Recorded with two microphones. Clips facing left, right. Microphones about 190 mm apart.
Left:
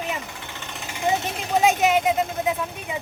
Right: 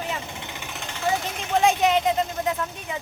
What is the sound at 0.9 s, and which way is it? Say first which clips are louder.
Vehicle: left 2 dB; 15° left (ahead or behind).